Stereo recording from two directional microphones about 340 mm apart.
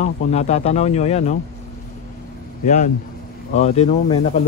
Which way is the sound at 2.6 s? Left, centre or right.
Left.